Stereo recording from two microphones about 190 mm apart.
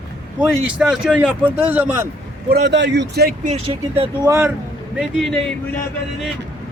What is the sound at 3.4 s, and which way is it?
Speech, 30° right (ahead or behind).